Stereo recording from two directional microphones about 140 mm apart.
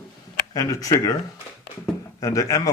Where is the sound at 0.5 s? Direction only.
25° left (ahead or behind).